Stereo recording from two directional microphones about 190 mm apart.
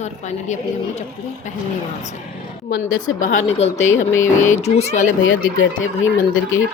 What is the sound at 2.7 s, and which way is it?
Speech, 90° left.